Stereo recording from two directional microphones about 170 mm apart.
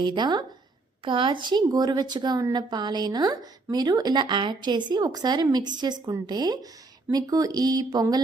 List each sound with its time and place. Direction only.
0.0 s a woman's voice: 25° right (ahead or behind)